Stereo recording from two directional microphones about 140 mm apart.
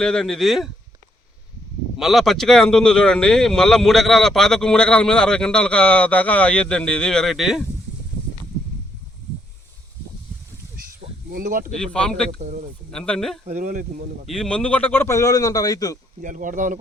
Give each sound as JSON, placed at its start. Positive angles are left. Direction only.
{"t": 0.0, "sound": "speech", "side_deg": 5}
{"t": 2.0, "sound": "speech", "side_deg": 0}
{"t": 11.3, "sound": "speech", "side_deg": -90}
{"t": 11.7, "sound": "speech", "side_deg": 5}
{"t": 13.5, "sound": "speech", "side_deg": -70}
{"t": 14.3, "sound": "speech", "side_deg": 5}
{"t": 16.2, "sound": "speech", "side_deg": -70}